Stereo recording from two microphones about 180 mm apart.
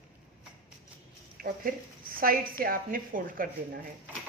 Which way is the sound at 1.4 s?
55° right (ahead or behind).